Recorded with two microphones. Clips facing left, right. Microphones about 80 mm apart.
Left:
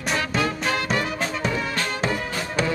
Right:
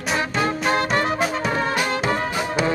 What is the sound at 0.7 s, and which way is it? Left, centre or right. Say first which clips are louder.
Music: right 4 dB; right.